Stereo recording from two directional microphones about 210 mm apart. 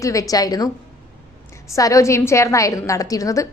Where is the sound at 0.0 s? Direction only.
15° left (ahead or behind).